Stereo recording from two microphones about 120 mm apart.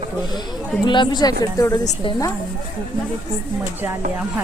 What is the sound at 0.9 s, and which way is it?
Speech, 40° left (ahead or behind).